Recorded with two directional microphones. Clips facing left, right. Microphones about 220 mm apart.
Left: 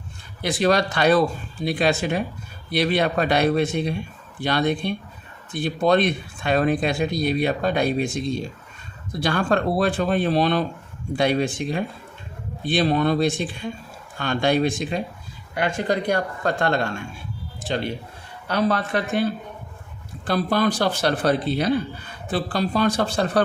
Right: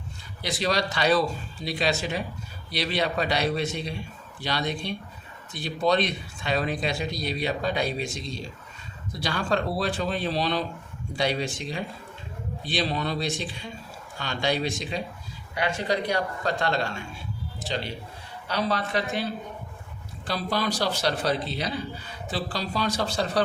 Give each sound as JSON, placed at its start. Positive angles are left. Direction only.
{"t": 0.4, "sound": "speech", "side_deg": 55}